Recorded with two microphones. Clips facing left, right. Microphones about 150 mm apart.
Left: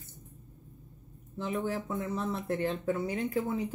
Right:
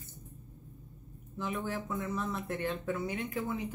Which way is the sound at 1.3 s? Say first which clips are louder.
Left 3 dB; 30° left (ahead or behind).